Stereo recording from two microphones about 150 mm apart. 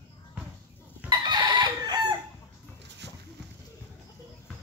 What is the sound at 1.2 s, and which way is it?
Chicken, 30° right (ahead or behind).